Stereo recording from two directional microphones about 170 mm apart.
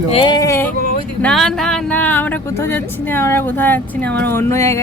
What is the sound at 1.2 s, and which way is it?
Speech, 5° left (ahead or behind).